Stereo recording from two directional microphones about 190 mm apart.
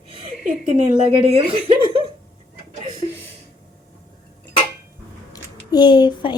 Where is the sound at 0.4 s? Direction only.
40° right (ahead or behind).